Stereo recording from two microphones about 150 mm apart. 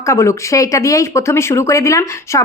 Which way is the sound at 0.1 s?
20° left (ahead or behind).